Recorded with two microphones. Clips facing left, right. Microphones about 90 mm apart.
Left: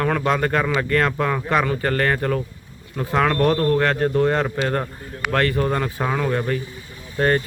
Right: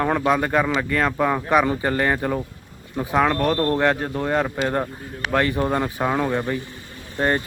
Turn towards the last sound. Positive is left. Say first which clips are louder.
# left 2 dB
turn(degrees=-15)  # may be behind; listen again after turning